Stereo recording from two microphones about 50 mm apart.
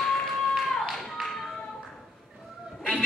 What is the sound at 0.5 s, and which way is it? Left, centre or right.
Tap, centre.